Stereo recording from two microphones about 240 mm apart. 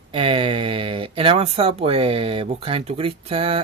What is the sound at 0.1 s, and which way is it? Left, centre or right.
Speech, right.